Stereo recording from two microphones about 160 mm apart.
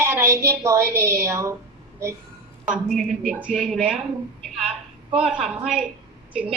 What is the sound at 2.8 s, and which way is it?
Speech, centre (ahead or behind).